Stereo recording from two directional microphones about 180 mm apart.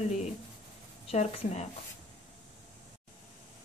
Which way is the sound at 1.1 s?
40° left (ahead or behind).